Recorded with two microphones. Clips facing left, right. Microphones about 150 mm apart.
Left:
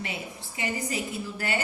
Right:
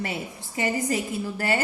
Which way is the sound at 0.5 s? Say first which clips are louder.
Right 6 dB; 40° right (ahead or behind).